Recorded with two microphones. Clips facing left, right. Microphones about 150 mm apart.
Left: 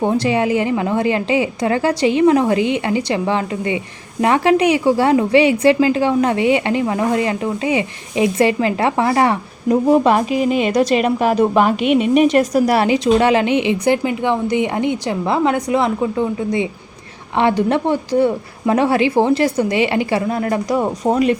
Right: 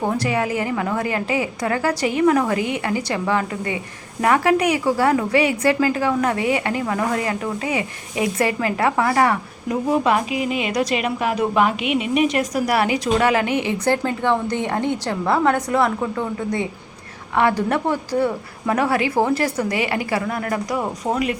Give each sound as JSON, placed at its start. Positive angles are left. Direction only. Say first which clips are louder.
{"t": 0.0, "sound": "a woman's voice", "louder": "left 5 dB", "side_deg": 25}